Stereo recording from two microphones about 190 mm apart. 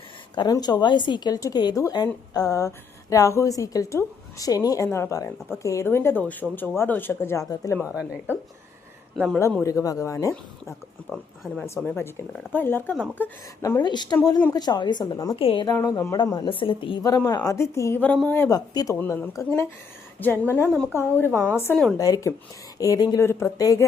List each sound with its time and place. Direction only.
0.3 s a woman's voice: 20° left (ahead or behind)
7.9 s speech: 5° right (ahead or behind)
9.6 s a woman's voice: 15° left (ahead or behind)
11.1 s a woman's voice: 5° left (ahead or behind); by 15.6 s 25° left (ahead or behind)
15.6 s a woman's voice: 15° left (ahead or behind)